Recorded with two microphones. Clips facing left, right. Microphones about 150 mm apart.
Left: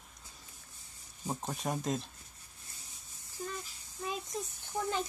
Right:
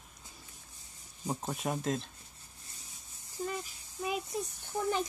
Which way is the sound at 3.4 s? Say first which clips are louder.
Right 4 dB; 25° right (ahead or behind).